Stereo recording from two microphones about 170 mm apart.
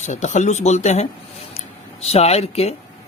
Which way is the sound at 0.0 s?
45° left (ahead or behind).